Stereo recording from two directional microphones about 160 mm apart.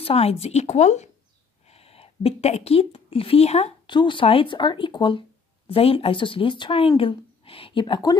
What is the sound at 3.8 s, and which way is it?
Speech, 30° left (ahead or behind).